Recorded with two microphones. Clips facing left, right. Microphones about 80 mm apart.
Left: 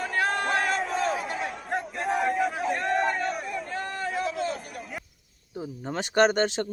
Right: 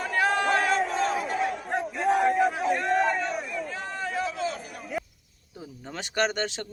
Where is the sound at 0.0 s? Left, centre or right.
Centre.